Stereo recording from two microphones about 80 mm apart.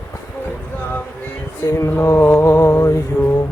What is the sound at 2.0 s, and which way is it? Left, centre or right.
Mantra, left.